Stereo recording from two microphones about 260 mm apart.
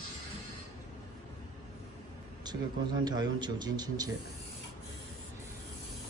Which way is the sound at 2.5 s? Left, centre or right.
Centre.